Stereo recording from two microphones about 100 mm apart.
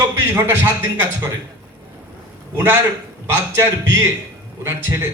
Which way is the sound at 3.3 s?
20° right (ahead or behind).